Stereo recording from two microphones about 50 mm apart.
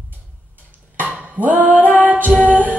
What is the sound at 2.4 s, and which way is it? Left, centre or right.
Music, right.